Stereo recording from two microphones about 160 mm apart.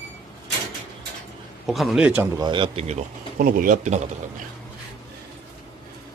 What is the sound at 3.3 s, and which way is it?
Speech, 60° right (ahead or behind).